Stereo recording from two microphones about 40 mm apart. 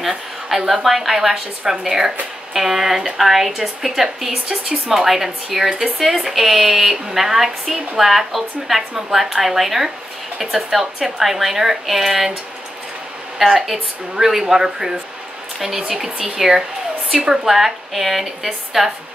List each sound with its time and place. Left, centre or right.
0.0 s speech: centre
13.4 s speech: centre